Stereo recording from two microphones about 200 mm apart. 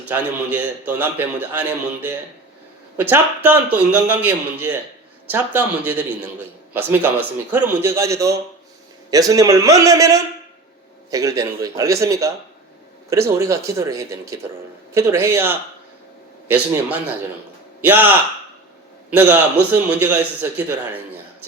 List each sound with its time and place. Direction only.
0.0 s a man's voice: 10° right (ahead or behind)
17.7 s a man's voice: 10° right (ahead or behind)
19.1 s a man's voice: 10° right (ahead or behind)